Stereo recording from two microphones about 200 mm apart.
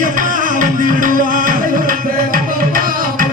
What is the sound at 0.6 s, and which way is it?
Music, 40° right (ahead or behind).